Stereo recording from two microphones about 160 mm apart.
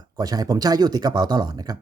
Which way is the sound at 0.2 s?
25° right (ahead or behind).